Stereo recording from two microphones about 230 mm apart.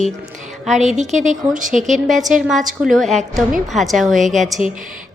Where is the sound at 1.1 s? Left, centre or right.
Right.